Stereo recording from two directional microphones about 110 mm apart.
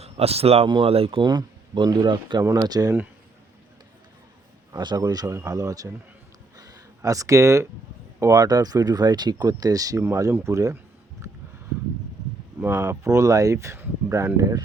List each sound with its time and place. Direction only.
0.0 s speech: 65° right (ahead or behind)
0.7 s speech: 55° right (ahead or behind)
1.3 s speech: 40° right (ahead or behind)
2.4 s speech: 30° right (ahead or behind)
4.7 s speech: 40° right (ahead or behind)
6.6 s a sound: 35° right (ahead or behind)
8.2 s speech: 35° right (ahead or behind)
12.5 s speech: 15° right (ahead or behind)